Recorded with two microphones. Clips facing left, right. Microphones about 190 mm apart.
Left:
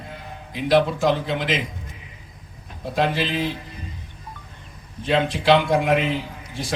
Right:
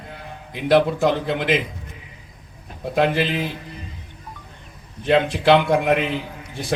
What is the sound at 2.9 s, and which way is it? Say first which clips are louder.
Speech: right 3 dB; 55° right (ahead or behind).